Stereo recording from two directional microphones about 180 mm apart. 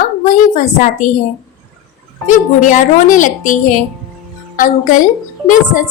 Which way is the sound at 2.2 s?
45° left (ahead or behind).